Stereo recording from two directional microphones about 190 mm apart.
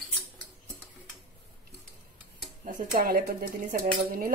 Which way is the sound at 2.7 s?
50° right (ahead or behind).